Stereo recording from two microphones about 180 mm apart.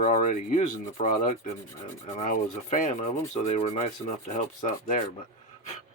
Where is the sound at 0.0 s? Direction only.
45° left (ahead or behind).